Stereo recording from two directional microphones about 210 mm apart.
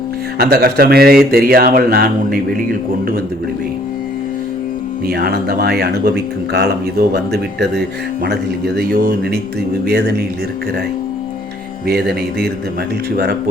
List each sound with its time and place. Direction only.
0.3 s speech: 45° right (ahead or behind)
5.0 s speech: 45° right (ahead or behind)
8.2 s speech: 50° right (ahead or behind)
11.9 s speech: 50° right (ahead or behind)